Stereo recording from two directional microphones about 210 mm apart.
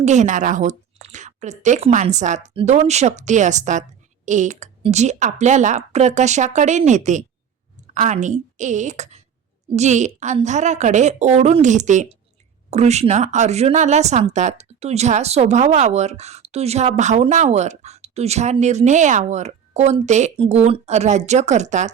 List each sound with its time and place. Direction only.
0.0 s speech: 35° right (ahead or behind)